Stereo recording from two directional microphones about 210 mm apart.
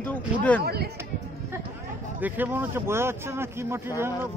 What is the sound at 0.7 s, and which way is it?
Speech, 50° right (ahead or behind).